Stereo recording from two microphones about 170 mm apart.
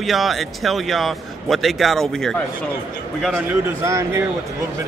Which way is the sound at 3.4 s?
10° right (ahead or behind).